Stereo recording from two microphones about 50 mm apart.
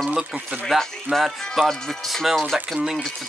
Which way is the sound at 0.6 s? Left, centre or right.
Centre.